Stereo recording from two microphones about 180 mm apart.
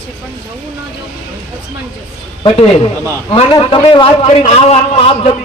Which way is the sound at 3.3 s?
30° left (ahead or behind).